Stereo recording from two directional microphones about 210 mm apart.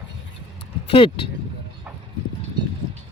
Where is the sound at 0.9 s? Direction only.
25° left (ahead or behind).